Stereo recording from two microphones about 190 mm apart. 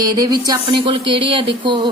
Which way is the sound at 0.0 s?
20° right (ahead or behind).